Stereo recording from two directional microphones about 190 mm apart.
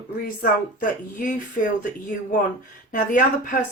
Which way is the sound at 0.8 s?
45° left (ahead or behind).